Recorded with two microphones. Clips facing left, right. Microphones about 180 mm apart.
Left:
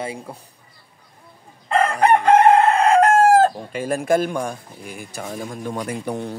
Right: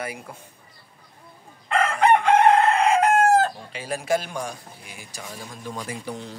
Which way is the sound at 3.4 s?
50° left (ahead or behind).